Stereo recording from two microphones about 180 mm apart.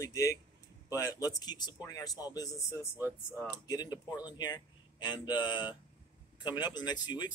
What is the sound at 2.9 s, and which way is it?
Speech, 10° right (ahead or behind).